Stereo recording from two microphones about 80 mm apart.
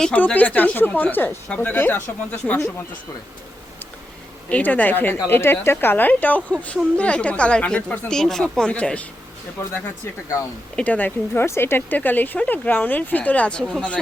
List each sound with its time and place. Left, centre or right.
0.1 s speech: centre
4.4 s a woman's voice: centre
9.6 s speech: left
10.8 s speech: left